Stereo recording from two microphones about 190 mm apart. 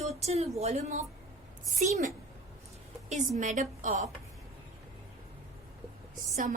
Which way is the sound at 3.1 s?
40° right (ahead or behind).